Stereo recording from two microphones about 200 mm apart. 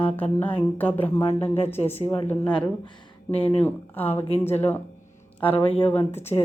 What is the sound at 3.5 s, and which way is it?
Speech, 10° left (ahead or behind).